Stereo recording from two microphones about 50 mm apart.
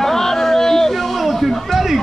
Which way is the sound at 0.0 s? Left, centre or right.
Centre.